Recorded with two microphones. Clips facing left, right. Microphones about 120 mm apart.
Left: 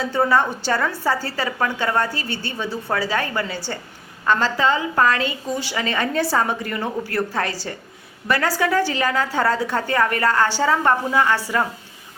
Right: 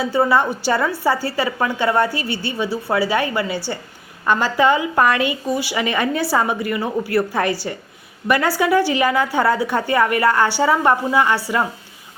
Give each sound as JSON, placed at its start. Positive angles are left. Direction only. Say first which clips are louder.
{"t": 0.0, "sound": "a woman's voice", "louder": "right 2 dB", "side_deg": -10}